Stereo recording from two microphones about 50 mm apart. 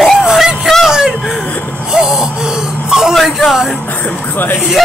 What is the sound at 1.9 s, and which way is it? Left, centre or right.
Speech, centre.